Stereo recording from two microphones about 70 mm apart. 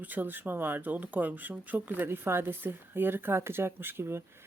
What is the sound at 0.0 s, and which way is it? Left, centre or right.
Speech, right.